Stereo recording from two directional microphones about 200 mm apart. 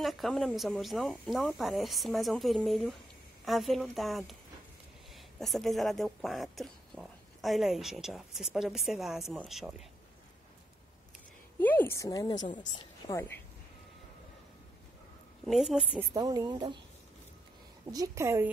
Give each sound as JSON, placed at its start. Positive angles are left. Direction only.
{"t": 0.0, "sound": "speech", "side_deg": 0}
{"t": 11.6, "sound": "a woman's voice", "side_deg": 10}
{"t": 15.4, "sound": "speech", "side_deg": 0}
{"t": 16.1, "sound": "speech", "side_deg": -20}
{"t": 17.9, "sound": "a woman's voice", "side_deg": -15}